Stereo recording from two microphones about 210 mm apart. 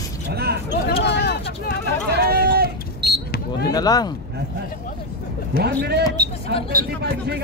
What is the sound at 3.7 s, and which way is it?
Speech, 20° left (ahead or behind).